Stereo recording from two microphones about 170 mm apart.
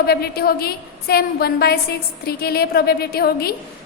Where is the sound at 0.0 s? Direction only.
65° left (ahead or behind).